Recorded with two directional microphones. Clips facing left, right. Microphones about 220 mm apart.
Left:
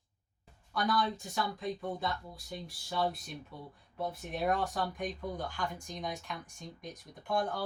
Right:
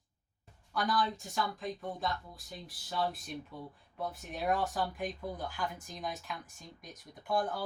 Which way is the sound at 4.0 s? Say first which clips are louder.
Left 3 dB; centre (ahead or behind).